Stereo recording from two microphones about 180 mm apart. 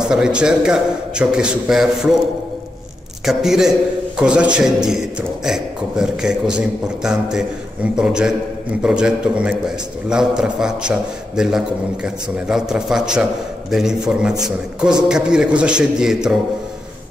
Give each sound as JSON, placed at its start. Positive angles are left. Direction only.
{"t": 0.1, "sound": "a man's voice", "side_deg": -5}
{"t": 3.3, "sound": "a man's voice", "side_deg": -5}